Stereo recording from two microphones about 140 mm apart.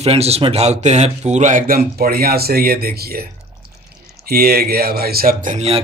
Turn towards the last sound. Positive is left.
turn(degrees=-80)